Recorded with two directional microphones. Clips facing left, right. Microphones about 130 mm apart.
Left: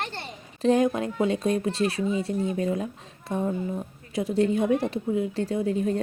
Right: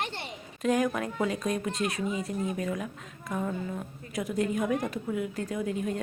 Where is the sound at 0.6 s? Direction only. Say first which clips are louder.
Left 5 dB; 25° left (ahead or behind).